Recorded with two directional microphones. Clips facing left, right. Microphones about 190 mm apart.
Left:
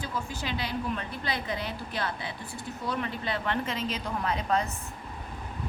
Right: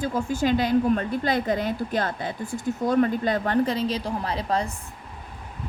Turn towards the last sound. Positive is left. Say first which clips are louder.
# right 2 dB
turn(degrees=-35)  # may be behind; listen again after turning